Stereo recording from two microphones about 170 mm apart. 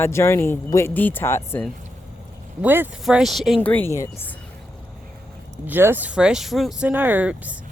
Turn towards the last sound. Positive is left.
turn(degrees=-10)  # may be behind; listen again after turning